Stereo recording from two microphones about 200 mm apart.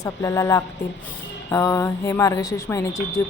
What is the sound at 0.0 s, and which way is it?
Speech, 15° left (ahead or behind).